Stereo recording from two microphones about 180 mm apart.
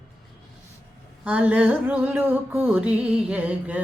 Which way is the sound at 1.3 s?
10° right (ahead or behind).